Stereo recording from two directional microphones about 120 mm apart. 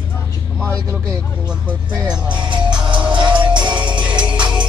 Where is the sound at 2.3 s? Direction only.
40° right (ahead or behind).